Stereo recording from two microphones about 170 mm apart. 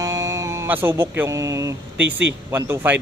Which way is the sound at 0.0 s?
20° right (ahead or behind).